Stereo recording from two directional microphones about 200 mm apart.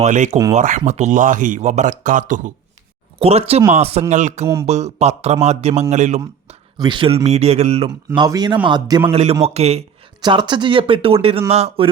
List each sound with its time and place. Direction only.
0.0 s speech: 35° right (ahead or behind)
6.7 s a man's voice: 25° right (ahead or behind)
9.4 s speech: 30° right (ahead or behind)
10.2 s a man's voice: 20° right (ahead or behind)